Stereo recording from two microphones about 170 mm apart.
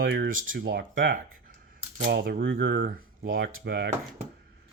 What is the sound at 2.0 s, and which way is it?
Speech, 60° right (ahead or behind).